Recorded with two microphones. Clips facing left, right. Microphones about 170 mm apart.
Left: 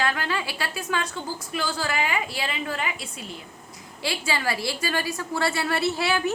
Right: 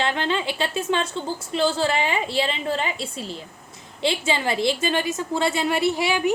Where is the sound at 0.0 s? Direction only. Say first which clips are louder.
Right 3 dB; 25° right (ahead or behind).